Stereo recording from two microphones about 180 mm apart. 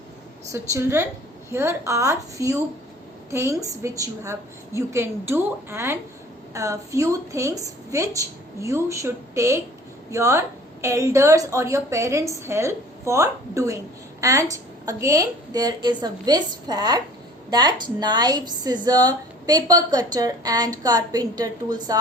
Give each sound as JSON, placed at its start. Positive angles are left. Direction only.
{"t": 0.5, "sound": "a woman's voice", "side_deg": -15}